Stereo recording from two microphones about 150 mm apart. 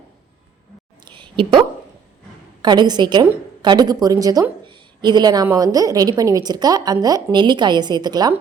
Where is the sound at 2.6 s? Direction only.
30° right (ahead or behind).